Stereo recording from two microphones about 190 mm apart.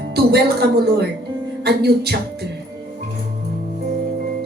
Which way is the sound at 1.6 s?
60° right (ahead or behind).